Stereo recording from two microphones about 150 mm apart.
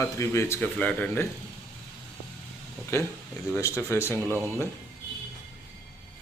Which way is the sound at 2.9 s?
20° left (ahead or behind).